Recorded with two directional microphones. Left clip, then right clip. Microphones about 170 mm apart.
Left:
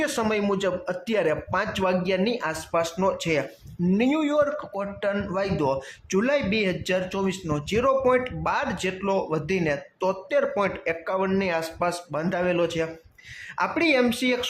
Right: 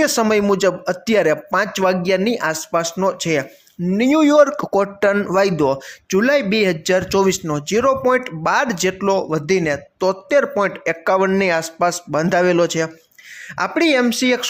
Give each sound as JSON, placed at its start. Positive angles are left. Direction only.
{"t": 0.0, "sound": "a man's voice", "side_deg": -30}
{"t": 11.0, "sound": "a man's voice", "side_deg": -40}